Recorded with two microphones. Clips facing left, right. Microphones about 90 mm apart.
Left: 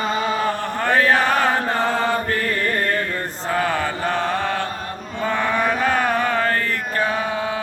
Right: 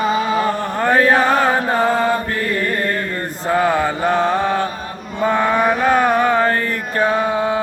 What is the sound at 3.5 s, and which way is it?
Mantra, 15° right (ahead or behind).